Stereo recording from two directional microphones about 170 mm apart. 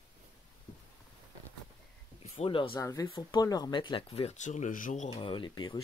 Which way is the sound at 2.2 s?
35° left (ahead or behind).